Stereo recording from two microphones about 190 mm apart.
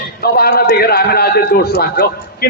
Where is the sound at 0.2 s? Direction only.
55° left (ahead or behind).